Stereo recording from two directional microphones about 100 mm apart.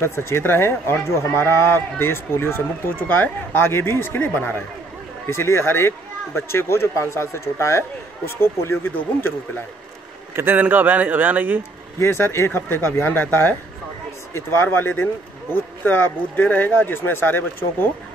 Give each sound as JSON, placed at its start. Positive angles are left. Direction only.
{"t": 0.0, "sound": "speech", "side_deg": 25}
{"t": 10.3, "sound": "speech", "side_deg": -20}
{"t": 12.0, "sound": "speech", "side_deg": 25}